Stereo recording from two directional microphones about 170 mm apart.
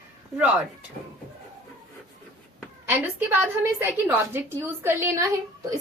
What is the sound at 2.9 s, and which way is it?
A woman's voice, 10° right (ahead or behind).